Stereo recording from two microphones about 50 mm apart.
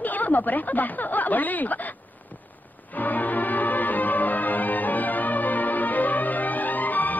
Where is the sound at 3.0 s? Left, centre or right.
Left.